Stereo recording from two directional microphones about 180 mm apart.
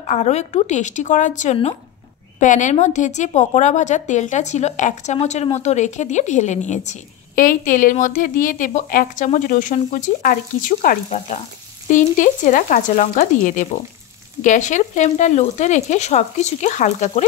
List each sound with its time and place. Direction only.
0.0 s a woman's voice: 40° left (ahead or behind)